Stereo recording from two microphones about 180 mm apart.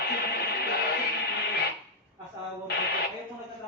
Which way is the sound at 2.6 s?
65° left (ahead or behind).